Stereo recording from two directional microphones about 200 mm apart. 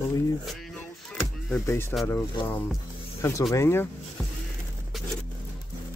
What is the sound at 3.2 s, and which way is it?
Speech, 15° left (ahead or behind).